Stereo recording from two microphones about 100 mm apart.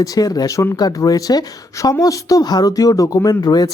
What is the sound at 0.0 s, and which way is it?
Speech, 35° left (ahead or behind).